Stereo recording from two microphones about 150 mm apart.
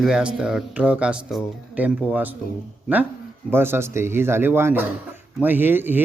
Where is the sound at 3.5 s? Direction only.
15° right (ahead or behind).